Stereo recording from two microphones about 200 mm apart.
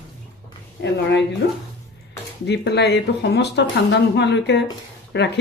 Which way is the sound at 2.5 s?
55° left (ahead or behind).